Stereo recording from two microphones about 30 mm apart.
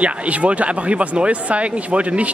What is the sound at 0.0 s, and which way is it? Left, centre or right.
Speech, right.